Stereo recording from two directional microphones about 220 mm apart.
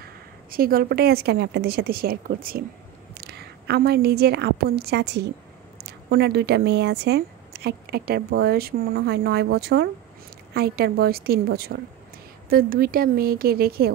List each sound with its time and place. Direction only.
0.0 s a woman's voice: 40° right (ahead or behind)